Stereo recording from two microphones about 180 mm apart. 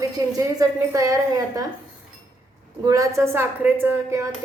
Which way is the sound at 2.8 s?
20° right (ahead or behind).